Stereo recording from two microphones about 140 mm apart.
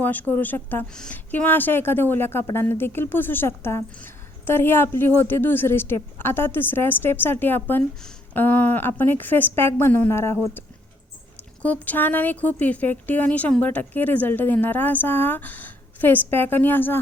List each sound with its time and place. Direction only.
0.0 s a woman's voice: 15° left (ahead or behind)
11.6 s a woman's voice: 10° left (ahead or behind)